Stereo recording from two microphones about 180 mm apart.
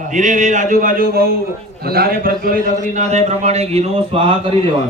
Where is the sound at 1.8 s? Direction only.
60° right (ahead or behind); by 4.3 s 30° right (ahead or behind).